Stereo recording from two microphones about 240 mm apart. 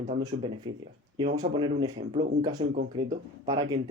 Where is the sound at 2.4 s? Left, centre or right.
Centre.